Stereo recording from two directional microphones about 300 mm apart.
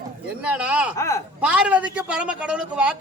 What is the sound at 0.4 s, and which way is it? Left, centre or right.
Speech, centre.